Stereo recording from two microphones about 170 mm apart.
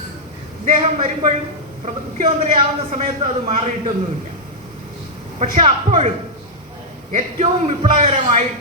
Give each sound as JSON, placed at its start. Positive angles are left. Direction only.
{"t": 0.6, "sound": "a man's voice", "side_deg": -40}
{"t": 5.4, "sound": "a man's voice", "side_deg": -40}
{"t": 7.1, "sound": "a man's voice", "side_deg": -45}